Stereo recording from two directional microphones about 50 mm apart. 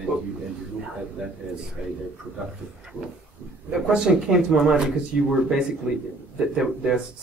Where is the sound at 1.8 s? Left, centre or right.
Centre.